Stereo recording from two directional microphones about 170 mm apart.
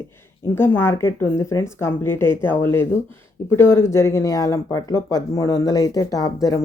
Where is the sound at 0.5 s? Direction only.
15° left (ahead or behind).